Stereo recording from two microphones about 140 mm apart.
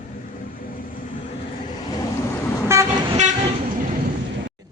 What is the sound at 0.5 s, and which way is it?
Vehicle, 75° left (ahead or behind).